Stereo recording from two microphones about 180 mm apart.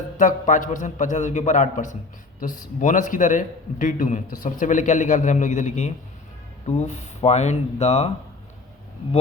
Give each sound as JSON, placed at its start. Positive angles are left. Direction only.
{"t": 0.2, "sound": "a man's voice", "side_deg": 45}